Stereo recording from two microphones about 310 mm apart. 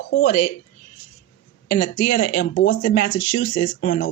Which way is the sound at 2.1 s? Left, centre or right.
Left.